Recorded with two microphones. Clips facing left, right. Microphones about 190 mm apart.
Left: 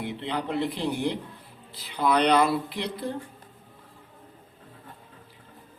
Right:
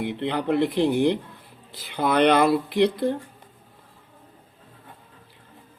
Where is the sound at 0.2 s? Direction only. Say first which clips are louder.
Right 6 dB; 60° right (ahead or behind); by 1.1 s 75° right (ahead or behind).